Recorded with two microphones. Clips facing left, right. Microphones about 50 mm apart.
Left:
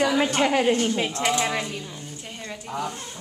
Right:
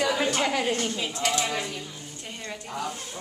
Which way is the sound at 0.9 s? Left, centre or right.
Left.